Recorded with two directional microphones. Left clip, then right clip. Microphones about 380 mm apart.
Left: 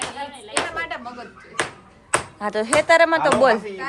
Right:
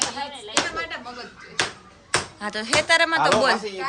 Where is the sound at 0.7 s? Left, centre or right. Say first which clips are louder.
Left 2 dB; centre.